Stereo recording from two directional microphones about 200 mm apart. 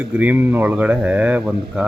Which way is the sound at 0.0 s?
10° right (ahead or behind).